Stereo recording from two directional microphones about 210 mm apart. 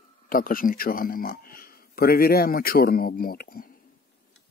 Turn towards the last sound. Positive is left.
turn(degrees=45)  # may be behind; listen again after turning